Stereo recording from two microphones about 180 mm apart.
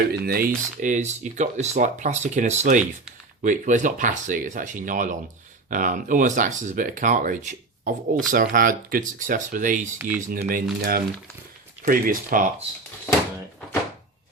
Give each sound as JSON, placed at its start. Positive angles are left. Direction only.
{"t": 0.1, "sound": "speech", "side_deg": -55}